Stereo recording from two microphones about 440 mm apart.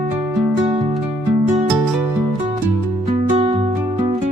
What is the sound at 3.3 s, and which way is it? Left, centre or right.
Music, centre.